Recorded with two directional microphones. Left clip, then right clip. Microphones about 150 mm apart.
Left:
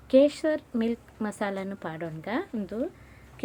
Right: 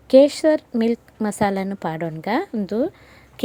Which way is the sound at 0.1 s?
50° right (ahead or behind).